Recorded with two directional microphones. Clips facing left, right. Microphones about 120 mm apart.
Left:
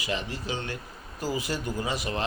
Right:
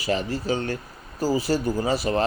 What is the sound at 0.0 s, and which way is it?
Speech, 40° right (ahead or behind).